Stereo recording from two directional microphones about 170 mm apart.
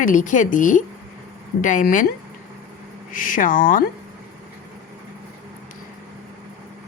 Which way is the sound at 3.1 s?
55° left (ahead or behind).